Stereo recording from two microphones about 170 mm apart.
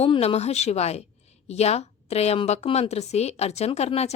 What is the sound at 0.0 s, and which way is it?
A woman's voice, 35° left (ahead or behind).